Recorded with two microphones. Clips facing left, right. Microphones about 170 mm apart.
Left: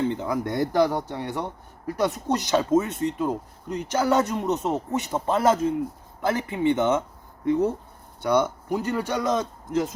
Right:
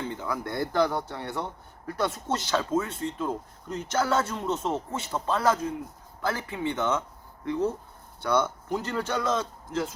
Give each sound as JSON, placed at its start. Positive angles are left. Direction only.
{"t": 0.1, "sound": "speech", "side_deg": 20}
{"t": 8.2, "sound": "speech", "side_deg": 15}